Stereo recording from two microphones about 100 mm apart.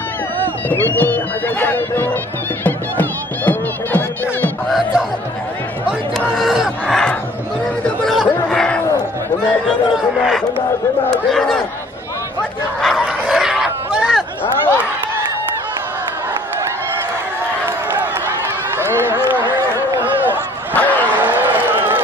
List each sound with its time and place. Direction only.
0.7 s speech: 20° left (ahead or behind)
2.6 s music: 15° left (ahead or behind)
4.6 s music: centre (ahead or behind)
6.1 s a sound: centre (ahead or behind)
8.0 s chatter: 5° left (ahead or behind)
8.5 s a sound: 10° left (ahead or behind)
9.4 s speech: 5° left (ahead or behind)
12.8 s bow-wow: 5° left (ahead or behind)
18.8 s run: 25° right (ahead or behind)
20.7 s vehicle: 15° left (ahead or behind)
21.4 s vehicle: 20° right (ahead or behind)